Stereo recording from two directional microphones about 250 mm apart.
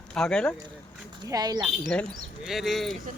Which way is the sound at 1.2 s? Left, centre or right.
Centre.